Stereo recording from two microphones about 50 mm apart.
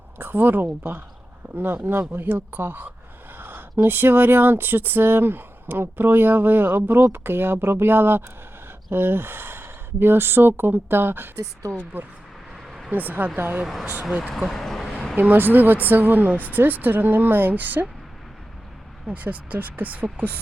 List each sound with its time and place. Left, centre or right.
0.2 s speech: right
12.5 s vehicle: centre
12.9 s speech: right
14.3 s a sound: centre
15.1 s speech: right
19.1 s speech: right